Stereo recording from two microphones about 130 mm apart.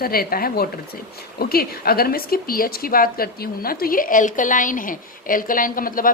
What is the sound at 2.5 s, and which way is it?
Speech, 90° left.